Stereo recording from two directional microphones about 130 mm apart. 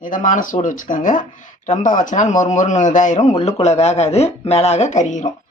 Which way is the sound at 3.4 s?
60° left (ahead or behind).